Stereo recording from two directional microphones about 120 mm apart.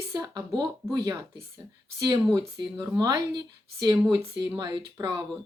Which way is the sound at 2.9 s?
35° right (ahead or behind).